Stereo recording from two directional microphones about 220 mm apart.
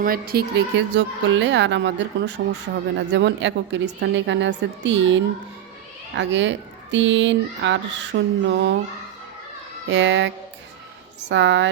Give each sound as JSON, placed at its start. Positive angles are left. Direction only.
{"t": 0.0, "sound": "speech", "side_deg": -40}
{"t": 9.8, "sound": "speech", "side_deg": -55}